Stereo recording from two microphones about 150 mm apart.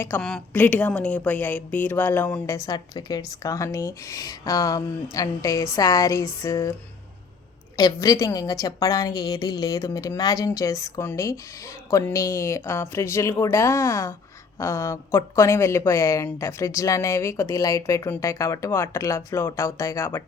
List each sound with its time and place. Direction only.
0.2 s a woman's voice: 5° left (ahead or behind)
2.6 s a woman's voice: 30° left (ahead or behind)
7.8 s a woman's voice: 25° left (ahead or behind)